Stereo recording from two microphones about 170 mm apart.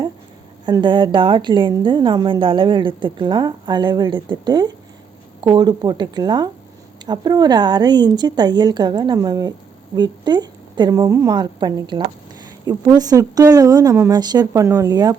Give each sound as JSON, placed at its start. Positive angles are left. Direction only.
{"t": 0.6, "sound": "speech", "side_deg": -25}